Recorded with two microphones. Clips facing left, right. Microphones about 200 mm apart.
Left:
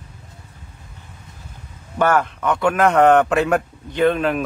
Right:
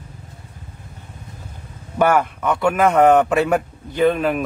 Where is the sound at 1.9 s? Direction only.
10° right (ahead or behind).